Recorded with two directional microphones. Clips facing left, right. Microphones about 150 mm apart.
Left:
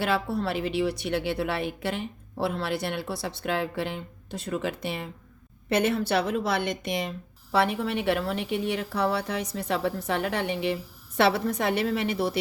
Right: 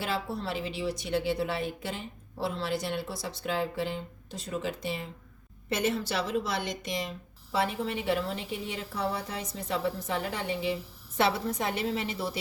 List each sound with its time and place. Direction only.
0.0 s a woman's voice: 65° left (ahead or behind)